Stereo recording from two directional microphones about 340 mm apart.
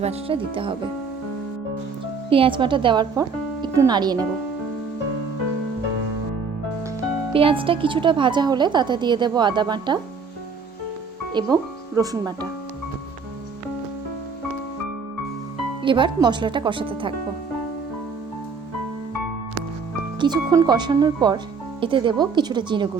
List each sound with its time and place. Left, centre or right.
0.0 s speech: centre
2.3 s speech: centre
7.3 s speech: centre
11.3 s speech: centre
15.8 s speech: centre
20.1 s speech: centre